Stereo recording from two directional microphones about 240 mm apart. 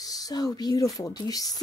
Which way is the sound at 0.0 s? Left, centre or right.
Centre.